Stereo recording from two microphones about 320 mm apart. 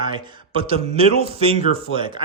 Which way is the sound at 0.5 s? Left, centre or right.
Centre.